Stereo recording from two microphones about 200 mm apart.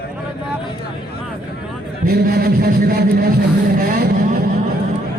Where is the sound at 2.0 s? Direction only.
50° right (ahead or behind).